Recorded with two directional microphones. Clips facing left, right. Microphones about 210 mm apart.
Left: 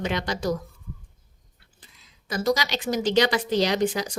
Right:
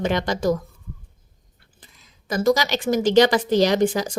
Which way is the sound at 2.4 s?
50° right (ahead or behind).